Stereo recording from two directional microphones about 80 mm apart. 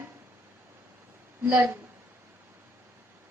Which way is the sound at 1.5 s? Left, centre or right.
Right.